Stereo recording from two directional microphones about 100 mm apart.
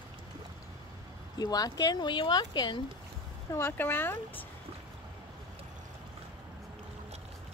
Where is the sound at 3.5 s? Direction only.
20° left (ahead or behind).